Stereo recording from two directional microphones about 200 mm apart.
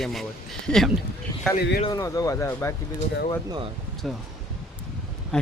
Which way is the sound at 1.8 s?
20° left (ahead or behind).